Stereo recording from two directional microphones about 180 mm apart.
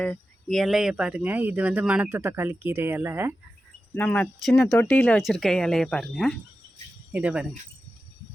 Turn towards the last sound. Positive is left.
turn(degrees=-10)  # may be behind; listen again after turning